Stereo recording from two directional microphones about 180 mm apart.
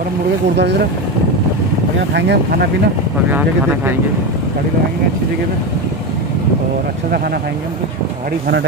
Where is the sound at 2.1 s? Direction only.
65° right (ahead or behind).